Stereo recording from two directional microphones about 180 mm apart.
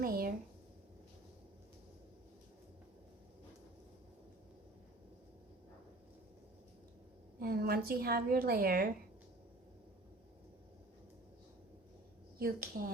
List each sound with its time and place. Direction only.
0.0 s speech: 55° right (ahead or behind)
7.3 s a woman's voice: 55° right (ahead or behind)
12.4 s speech: 55° right (ahead or behind)